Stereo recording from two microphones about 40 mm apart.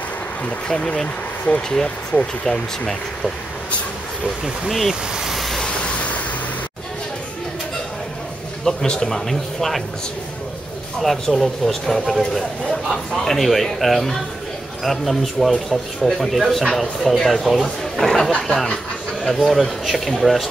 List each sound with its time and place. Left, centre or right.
0.7 s speech: left
4.6 s speech: centre
5.3 s vehicle: centre
8.6 s speech: centre
11.0 s speech: centre